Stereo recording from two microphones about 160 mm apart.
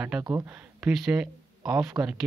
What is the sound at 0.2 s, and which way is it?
Speech, 20° right (ahead or behind).